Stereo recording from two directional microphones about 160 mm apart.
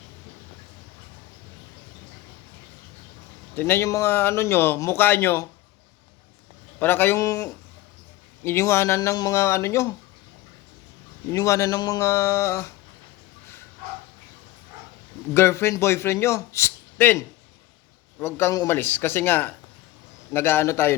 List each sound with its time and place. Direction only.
3.5 s speech: 15° left (ahead or behind)
6.7 s speech: 15° left (ahead or behind)
11.3 s a man's voice: 20° left (ahead or behind)
15.3 s speech: 15° left (ahead or behind)